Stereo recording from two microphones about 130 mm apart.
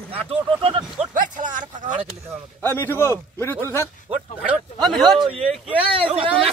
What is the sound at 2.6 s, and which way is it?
A man's voice, 15° left (ahead or behind).